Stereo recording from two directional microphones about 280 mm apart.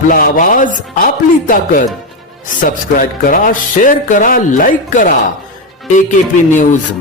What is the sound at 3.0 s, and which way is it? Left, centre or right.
Speech, left.